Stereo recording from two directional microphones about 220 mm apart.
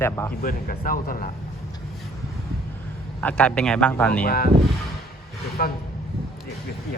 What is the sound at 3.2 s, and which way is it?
A man's voice, 5° left (ahead or behind).